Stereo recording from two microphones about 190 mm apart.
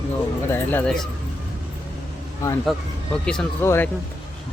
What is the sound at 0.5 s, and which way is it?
Speech, 10° left (ahead or behind).